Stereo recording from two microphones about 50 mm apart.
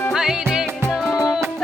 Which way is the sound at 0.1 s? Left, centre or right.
Centre.